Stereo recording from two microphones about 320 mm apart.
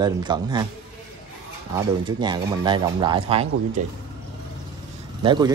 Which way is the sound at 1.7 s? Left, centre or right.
Centre.